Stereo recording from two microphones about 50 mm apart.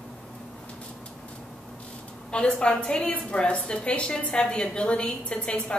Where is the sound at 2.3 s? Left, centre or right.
Centre.